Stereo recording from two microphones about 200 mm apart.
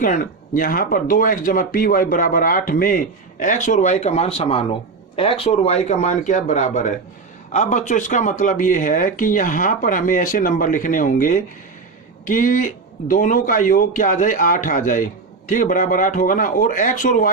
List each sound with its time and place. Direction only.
0.0 s speech: 40° left (ahead or behind)